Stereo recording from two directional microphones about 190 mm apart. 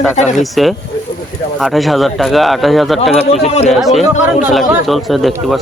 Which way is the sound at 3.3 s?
35° left (ahead or behind).